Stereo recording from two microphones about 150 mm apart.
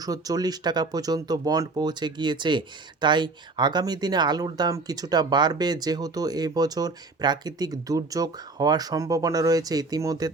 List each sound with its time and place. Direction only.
0.0 s speech: 25° right (ahead or behind)